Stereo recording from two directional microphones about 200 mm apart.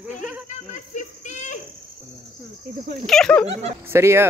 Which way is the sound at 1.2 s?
35° left (ahead or behind).